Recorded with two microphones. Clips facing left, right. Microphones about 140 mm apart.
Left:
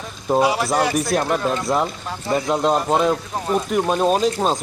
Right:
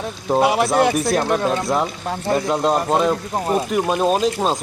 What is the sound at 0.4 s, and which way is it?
Speech, 60° right (ahead or behind).